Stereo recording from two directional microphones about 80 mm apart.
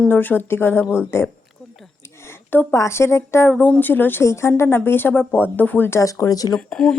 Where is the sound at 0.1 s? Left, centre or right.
Left.